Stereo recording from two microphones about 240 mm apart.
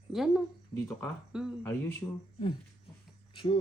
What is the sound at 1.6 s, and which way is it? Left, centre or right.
Speech, centre.